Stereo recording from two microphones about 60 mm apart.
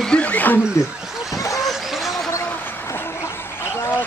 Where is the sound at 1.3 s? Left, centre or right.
Left.